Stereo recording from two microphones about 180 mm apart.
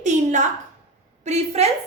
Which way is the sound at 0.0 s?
40° right (ahead or behind).